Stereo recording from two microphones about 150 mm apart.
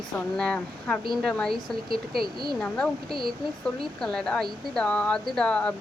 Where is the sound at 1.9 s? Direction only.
85° right.